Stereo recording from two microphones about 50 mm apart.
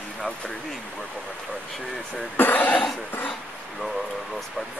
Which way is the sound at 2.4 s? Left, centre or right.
Left.